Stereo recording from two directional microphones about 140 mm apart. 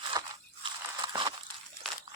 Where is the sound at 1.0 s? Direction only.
35° right (ahead or behind).